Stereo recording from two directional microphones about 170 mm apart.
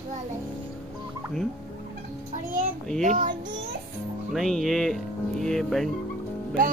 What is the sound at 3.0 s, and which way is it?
Speech, 45° right (ahead or behind).